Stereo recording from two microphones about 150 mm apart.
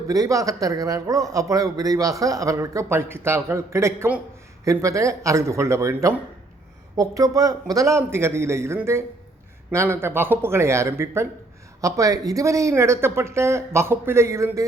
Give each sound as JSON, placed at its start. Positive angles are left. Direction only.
{"t": 0.1, "sound": "a man's voice", "side_deg": -25}